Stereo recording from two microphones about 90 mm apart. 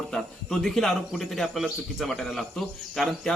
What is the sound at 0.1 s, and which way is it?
A man's voice, 5° left (ahead or behind).